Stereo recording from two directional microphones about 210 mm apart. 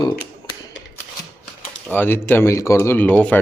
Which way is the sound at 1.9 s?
10° left (ahead or behind).